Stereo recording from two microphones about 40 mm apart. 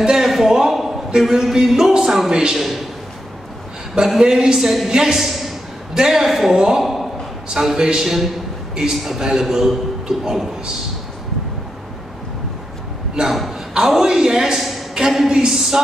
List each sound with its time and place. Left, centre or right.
0.0 s a sound: centre
2.5 s a man's voice: centre
4.2 s a woman's voice: centre
6.8 s a sound: centre
7.5 s a woman's voice: centre
13.2 s a man's voice: right